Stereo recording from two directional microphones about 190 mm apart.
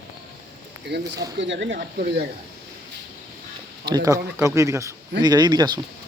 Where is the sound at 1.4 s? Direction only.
70° right (ahead or behind).